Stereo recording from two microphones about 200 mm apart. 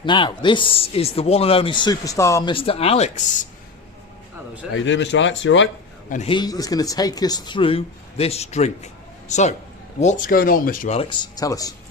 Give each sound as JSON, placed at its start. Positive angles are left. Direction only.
{"t": 0.0, "sound": "speech", "side_deg": 25}
{"t": 4.7, "sound": "speech", "side_deg": 70}
{"t": 6.1, "sound": "a man's voice", "side_deg": 35}
{"t": 6.3, "sound": "a man's voice", "side_deg": 20}
{"t": 11.3, "sound": "speech", "side_deg": 15}